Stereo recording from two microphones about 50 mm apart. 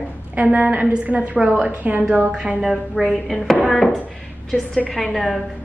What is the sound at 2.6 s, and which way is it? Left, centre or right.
Speech, centre.